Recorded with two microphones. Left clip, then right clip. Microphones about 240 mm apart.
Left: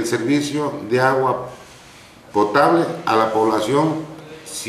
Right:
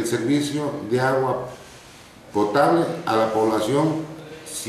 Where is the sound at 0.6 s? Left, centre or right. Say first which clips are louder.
Left 4 dB; centre.